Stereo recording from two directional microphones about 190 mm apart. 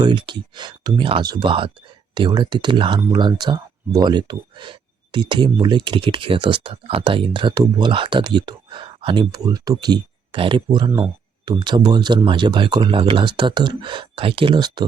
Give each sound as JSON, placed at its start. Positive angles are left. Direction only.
{"t": 0.0, "sound": "speech", "side_deg": -25}